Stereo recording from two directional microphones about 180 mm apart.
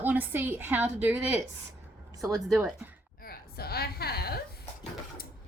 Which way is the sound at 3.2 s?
60° left (ahead or behind).